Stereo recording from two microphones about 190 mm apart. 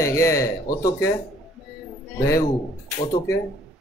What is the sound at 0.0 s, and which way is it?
A man's voice, 15° left (ahead or behind).